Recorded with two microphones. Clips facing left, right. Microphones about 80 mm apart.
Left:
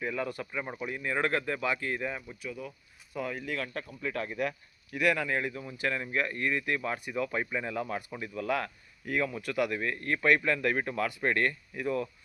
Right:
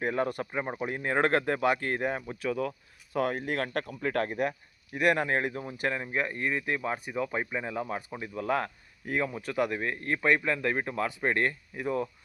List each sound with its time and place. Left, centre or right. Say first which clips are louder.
0.0 s speech: right 4 dB; right
0.6 s speech: right 3 dB; right
2.5 s speech: right 11 dB; right
5.9 s speech: left 2 dB; right
8.4 s speech: right 2 dB; right